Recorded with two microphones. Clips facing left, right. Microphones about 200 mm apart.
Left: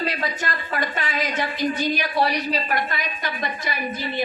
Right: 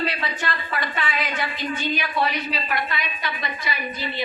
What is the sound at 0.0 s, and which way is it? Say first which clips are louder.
A woman's voice: left 1 dB; 40° left (ahead or behind).